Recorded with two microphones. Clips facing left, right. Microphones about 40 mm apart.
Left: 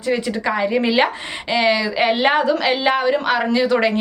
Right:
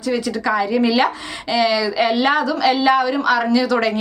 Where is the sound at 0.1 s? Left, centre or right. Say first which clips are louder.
Right 1 dB; left.